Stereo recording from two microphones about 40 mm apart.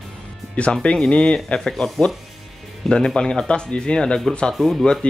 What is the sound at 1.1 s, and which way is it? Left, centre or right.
Speech, left.